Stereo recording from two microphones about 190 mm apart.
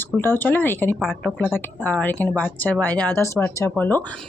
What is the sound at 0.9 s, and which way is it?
Speech, 5° right (ahead or behind).